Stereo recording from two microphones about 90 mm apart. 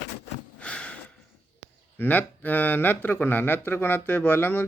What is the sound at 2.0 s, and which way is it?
Speech, 20° left (ahead or behind).